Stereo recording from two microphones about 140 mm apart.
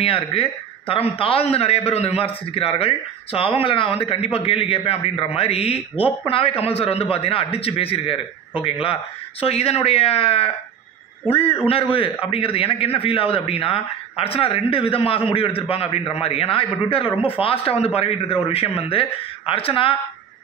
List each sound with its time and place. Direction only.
0.0 s a man's voice: 40° left (ahead or behind)